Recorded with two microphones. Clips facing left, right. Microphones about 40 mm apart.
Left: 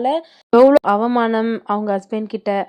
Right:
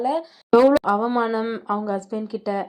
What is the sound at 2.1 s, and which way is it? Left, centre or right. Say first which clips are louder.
Speech: left 5 dB; left.